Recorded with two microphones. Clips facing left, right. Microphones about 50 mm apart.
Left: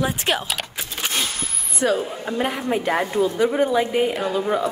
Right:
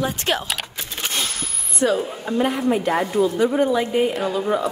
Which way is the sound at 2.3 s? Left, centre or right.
Left.